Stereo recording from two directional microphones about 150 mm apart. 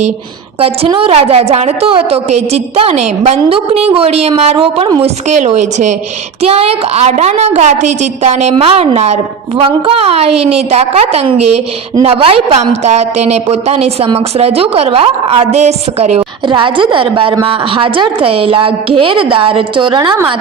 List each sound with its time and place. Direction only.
0.6 s a woman's voice: 40° right (ahead or behind)
6.4 s a woman's voice: 40° right (ahead or behind)
16.5 s a woman's voice: 35° right (ahead or behind)